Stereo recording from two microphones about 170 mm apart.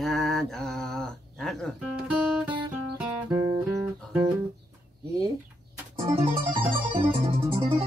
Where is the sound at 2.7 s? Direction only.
10° right (ahead or behind).